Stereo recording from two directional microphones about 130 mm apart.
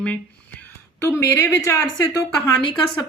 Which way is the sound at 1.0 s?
20° left (ahead or behind).